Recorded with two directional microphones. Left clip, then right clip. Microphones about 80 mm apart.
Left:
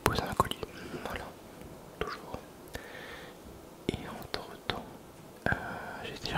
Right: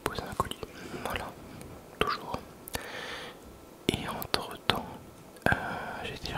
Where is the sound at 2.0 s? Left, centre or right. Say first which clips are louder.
Right 8 dB; right.